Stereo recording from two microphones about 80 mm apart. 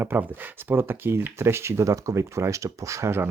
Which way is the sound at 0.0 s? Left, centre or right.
Right.